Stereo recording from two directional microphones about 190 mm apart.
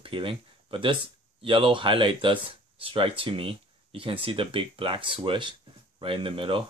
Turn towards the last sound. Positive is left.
turn(degrees=-30)  # may be behind; listen again after turning